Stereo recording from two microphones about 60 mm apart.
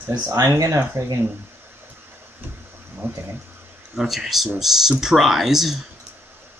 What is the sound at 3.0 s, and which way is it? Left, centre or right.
Speech, right.